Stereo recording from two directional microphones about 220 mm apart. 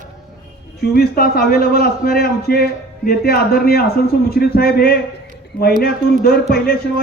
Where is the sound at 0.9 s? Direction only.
40° left (ahead or behind).